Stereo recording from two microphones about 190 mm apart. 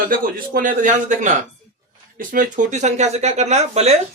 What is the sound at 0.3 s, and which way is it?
A man's voice, 45° right (ahead or behind).